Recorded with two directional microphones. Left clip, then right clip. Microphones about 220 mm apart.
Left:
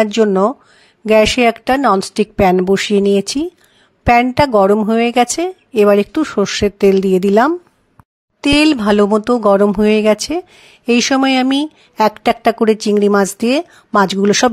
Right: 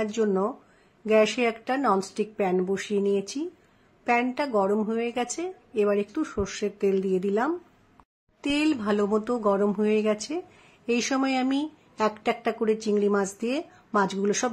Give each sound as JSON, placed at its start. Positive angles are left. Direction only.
{"t": 0.0, "sound": "speech", "side_deg": 40}